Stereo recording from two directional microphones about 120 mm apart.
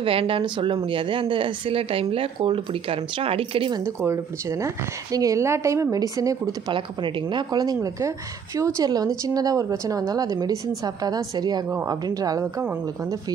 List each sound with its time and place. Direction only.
0.0 s speech: 50° right (ahead or behind)
3.8 s speech: 20° right (ahead or behind)
6.7 s speech: 45° right (ahead or behind)